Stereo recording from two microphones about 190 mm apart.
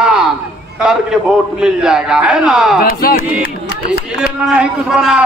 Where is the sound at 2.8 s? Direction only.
50° left (ahead or behind).